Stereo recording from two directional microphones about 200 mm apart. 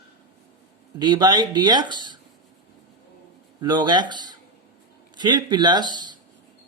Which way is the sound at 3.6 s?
20° right (ahead or behind).